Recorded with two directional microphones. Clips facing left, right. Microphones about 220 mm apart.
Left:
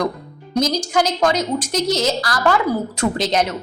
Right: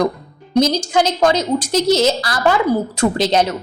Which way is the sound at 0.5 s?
25° right (ahead or behind).